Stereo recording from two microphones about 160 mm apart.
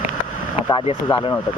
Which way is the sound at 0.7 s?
30° left (ahead or behind).